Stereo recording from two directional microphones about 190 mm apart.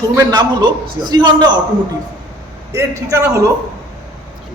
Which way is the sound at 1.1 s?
20° right (ahead or behind).